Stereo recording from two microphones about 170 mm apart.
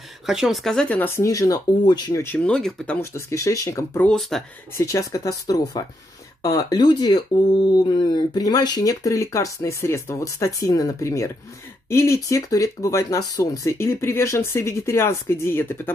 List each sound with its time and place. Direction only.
0.3 s speech: centre (ahead or behind); by 2.2 s 25° left (ahead or behind)
2.2 s speech: 5° left (ahead or behind)
3.0 s speech: 15° left (ahead or behind)
4.7 s speech: 15° left (ahead or behind)